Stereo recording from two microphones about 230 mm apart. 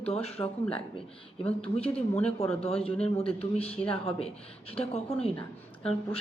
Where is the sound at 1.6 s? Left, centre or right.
Left.